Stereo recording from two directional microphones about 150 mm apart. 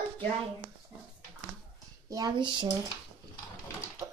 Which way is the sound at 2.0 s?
25° right (ahead or behind).